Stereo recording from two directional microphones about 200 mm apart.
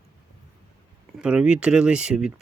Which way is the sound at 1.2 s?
5° right (ahead or behind).